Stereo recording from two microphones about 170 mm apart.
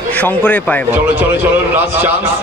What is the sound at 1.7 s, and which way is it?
Speech, 10° right (ahead or behind).